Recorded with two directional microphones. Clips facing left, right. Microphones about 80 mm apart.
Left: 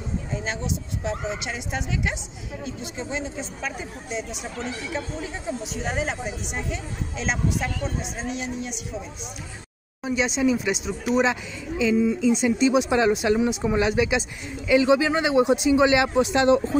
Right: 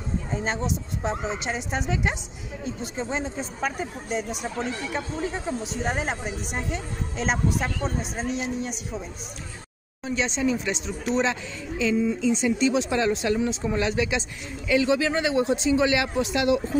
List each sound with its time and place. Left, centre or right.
0.3 s speech: right
10.0 s speech: centre
12.3 s speech: centre